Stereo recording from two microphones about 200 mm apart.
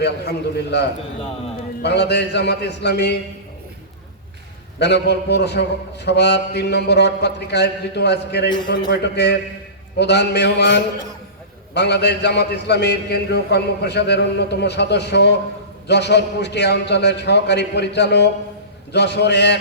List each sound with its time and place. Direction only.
0.0 s a man's voice: 55° left (ahead or behind)
4.8 s a man's voice: 55° left (ahead or behind)